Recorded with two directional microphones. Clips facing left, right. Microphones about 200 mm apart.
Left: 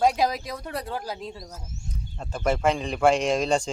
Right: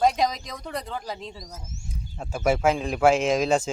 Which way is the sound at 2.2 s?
5° right (ahead or behind).